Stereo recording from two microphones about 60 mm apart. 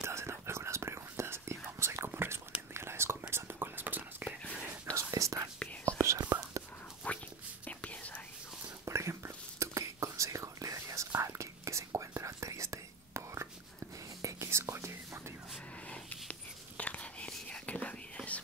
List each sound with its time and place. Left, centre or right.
0.0 s whispering: right
4.9 s whispering: right
7.0 s whispering: left
8.8 s whispering: right
15.9 s whispering: left